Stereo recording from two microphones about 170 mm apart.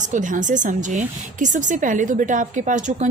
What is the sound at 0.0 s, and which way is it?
Speech, 50° right (ahead or behind).